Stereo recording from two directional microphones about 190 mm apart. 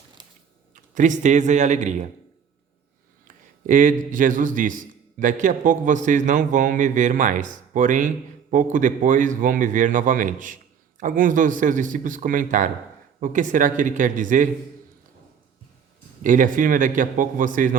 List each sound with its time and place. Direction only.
0.2 s a sound: 25° right (ahead or behind)
0.7 s speech: 40° right (ahead or behind)
3.2 s a man's voice: 45° right (ahead or behind)
16.2 s a man's voice: 45° right (ahead or behind)